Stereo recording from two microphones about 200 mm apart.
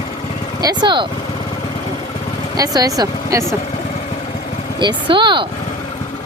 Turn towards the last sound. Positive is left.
turn(degrees=-25)  # may be behind; listen again after turning